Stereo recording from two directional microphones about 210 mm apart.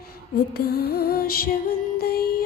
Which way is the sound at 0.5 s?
45° left (ahead or behind).